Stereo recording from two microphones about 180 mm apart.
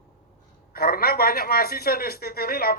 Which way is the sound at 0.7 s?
55° left (ahead or behind).